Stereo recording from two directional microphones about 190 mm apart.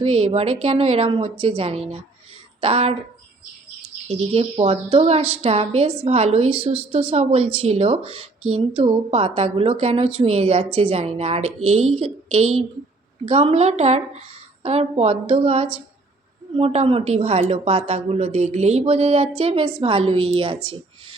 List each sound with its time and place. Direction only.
0.0 s a woman's voice: 30° right (ahead or behind)
4.1 s a woman's voice: 30° right (ahead or behind)